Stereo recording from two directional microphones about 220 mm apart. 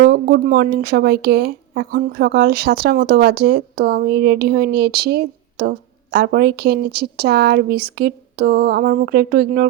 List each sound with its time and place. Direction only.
0.0 s speech: 45° right (ahead or behind)